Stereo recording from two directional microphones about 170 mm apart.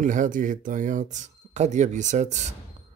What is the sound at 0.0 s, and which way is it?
Speech, 50° right (ahead or behind).